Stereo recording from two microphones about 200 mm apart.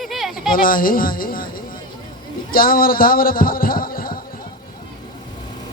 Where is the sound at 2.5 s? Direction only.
45° left (ahead or behind).